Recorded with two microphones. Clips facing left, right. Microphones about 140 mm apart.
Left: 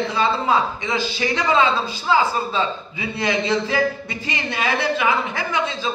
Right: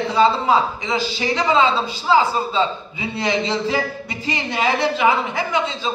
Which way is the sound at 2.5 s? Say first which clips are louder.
Right 2 dB; 25° right (ahead or behind).